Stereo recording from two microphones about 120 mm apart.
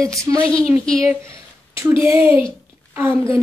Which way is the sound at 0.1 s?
25° right (ahead or behind).